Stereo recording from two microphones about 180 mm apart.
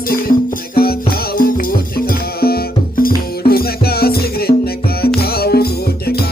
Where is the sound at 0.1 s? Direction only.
55° left (ahead or behind).